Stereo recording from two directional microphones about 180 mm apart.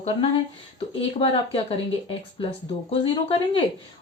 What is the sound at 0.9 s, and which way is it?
Speech, 30° left (ahead or behind).